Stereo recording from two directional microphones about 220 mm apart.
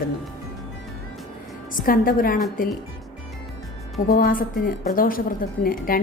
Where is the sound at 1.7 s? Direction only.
40° left (ahead or behind).